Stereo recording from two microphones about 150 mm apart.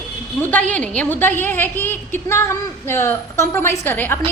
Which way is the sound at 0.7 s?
10° left (ahead or behind).